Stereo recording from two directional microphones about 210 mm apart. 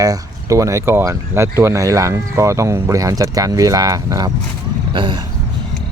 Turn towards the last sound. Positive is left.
turn(degrees=-20)  # may be behind; listen again after turning